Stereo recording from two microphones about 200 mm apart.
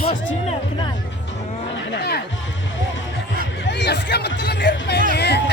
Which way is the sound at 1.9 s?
55° left (ahead or behind).